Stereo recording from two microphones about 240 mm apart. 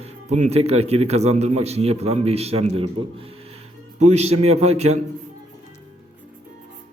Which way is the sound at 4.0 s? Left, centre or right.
Right.